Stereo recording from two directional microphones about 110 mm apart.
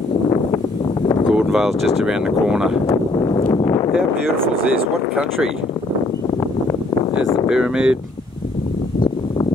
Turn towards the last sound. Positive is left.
turn(degrees=-5)  # may be behind; listen again after turning